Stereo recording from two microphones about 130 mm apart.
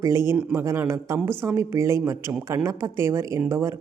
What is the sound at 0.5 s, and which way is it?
Speech, 20° right (ahead or behind).